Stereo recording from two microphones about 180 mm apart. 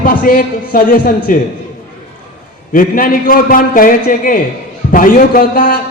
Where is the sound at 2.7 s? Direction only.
50° left (ahead or behind).